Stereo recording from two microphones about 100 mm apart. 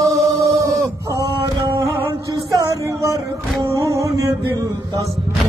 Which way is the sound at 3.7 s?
35° right (ahead or behind).